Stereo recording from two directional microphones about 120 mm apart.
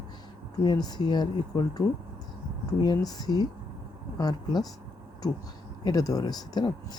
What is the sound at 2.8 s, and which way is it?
Speech, 35° left (ahead or behind).